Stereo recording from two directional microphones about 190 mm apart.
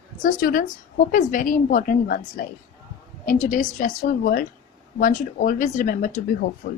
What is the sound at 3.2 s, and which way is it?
Speech, 45° left (ahead or behind).